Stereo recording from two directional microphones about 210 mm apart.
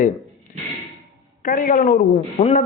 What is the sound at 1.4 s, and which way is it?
Speech, 40° left (ahead or behind).